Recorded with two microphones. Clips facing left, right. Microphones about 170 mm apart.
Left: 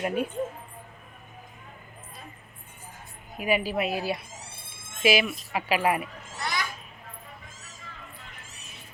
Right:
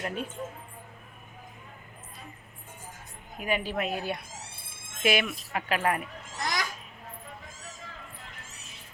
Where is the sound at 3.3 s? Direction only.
10° left (ahead or behind).